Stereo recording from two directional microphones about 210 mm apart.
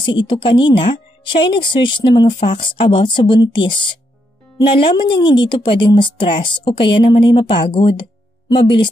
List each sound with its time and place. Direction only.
0.3 s speech: 25° left (ahead or behind)